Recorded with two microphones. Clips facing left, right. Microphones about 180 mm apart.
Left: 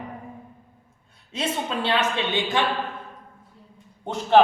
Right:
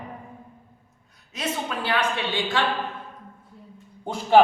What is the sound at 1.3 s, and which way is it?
A man's voice, 25° left (ahead or behind).